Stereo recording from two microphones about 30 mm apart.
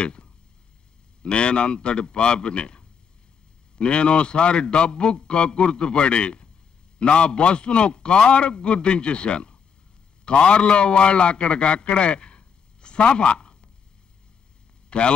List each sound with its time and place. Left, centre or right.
0.0 s a sound: left
1.2 s a man's voice: left
14.9 s speech: left